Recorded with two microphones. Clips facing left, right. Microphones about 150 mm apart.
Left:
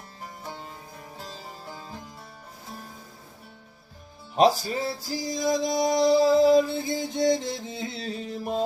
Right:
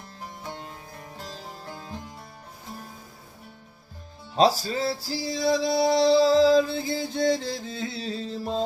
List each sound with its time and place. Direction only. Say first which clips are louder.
0.4 s music: right 1 dB; 5° left (ahead or behind)
4.4 s music: even; 20° left (ahead or behind)